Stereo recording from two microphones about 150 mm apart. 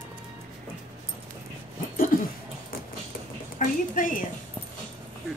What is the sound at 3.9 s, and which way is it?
Speech, 65° left (ahead or behind).